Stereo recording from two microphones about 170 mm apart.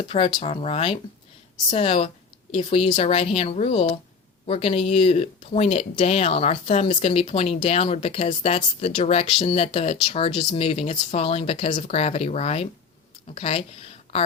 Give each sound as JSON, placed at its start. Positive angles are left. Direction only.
{"t": 0.1, "sound": "speech", "side_deg": 30}